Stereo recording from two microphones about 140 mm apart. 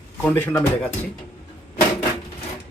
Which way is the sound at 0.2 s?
15° left (ahead or behind).